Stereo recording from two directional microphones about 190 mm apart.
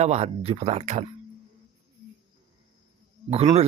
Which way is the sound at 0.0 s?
35° right (ahead or behind).